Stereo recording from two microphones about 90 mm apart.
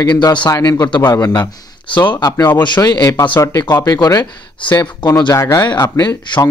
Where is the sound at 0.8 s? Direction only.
55° left (ahead or behind).